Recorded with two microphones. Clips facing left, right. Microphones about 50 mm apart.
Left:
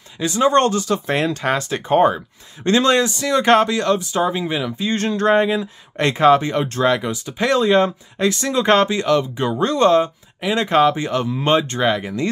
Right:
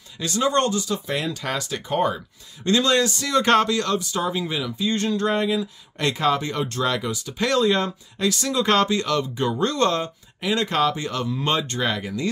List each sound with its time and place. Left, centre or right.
0.2 s speech: centre
0.5 s speech: left
3.1 s speech: centre